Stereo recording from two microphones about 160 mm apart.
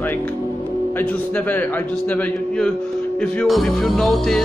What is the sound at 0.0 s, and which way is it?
Music, 10° left (ahead or behind).